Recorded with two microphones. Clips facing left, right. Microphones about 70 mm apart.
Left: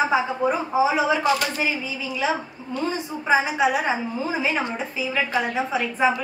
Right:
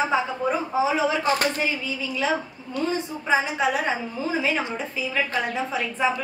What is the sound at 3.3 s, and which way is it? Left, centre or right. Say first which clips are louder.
A woman's voice: left 3 dB; centre.